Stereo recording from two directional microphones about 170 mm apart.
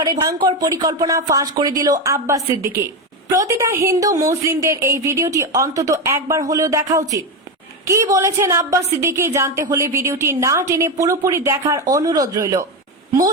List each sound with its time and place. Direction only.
0.0 s a woman's voice: 20° right (ahead or behind)